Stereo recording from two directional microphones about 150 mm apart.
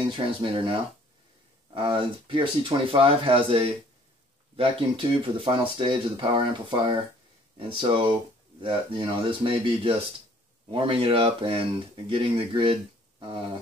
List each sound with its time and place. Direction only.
0.1 s speech: 35° right (ahead or behind)